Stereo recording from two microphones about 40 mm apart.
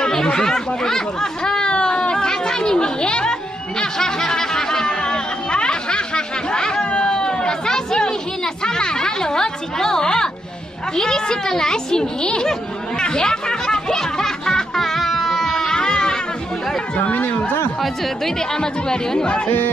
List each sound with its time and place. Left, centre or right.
0.0 s chatter: centre
3.8 s snicker: centre
8.6 s music: centre
11.0 s a woman's voice: centre
12.4 s chatter: centre
15.8 s goat: centre
17.1 s a sound: left
17.8 s speech: centre
18.5 s speech: centre